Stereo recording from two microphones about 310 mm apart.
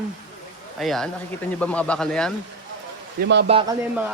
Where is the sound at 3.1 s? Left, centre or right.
Right.